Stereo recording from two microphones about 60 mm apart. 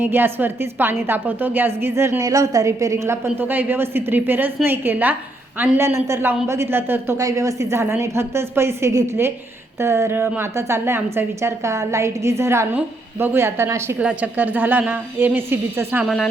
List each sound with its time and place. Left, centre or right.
0.0 s a woman's voice: right
2.2 s a woman's voice: right
3.2 s a woman's voice: right
5.8 s a woman's voice: right
7.2 s a woman's voice: right
10.2 s a woman's voice: right
10.5 s a woman's voice: right
13.1 s a woman's voice: right
14.0 s a woman's voice: right
16.0 s speech: centre